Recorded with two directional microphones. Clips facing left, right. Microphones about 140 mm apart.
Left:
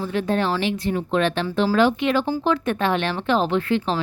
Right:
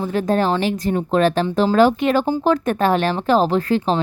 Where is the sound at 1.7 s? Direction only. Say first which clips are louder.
Right 4 dB; 40° right (ahead or behind).